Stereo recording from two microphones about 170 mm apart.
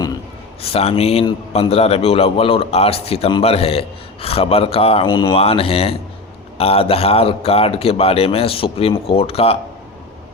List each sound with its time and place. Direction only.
0.6 s a man's voice: 35° left (ahead or behind)
5.0 s speech: 25° left (ahead or behind)
5.3 s a man's voice: 35° left (ahead or behind)